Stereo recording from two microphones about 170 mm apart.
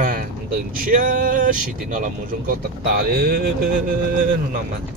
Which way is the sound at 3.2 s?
60° right (ahead or behind).